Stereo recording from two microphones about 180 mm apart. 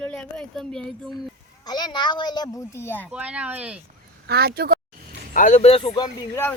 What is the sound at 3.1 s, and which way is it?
Speech, 5° right (ahead or behind).